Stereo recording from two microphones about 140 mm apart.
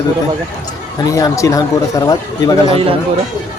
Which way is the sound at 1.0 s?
20° left (ahead or behind).